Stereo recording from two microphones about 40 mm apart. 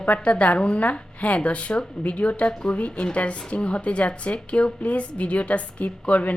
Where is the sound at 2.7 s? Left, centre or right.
Left.